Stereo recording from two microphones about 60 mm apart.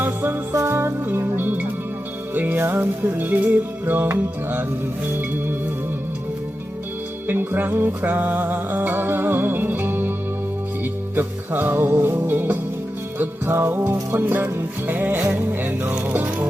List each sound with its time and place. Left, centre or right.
0.0 s music: right
7.3 s music: right
11.1 s music: right